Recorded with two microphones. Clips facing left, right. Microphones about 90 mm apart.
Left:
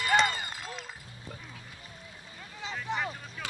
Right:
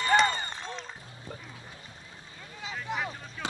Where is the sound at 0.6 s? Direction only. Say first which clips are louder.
Right 2 dB; 5° left (ahead or behind).